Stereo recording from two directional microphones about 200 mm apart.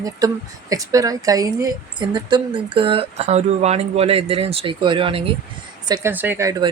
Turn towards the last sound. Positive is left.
turn(degrees=-15)  # may be behind; listen again after turning